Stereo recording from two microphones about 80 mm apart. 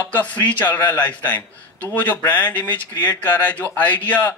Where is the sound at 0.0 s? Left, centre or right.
Left.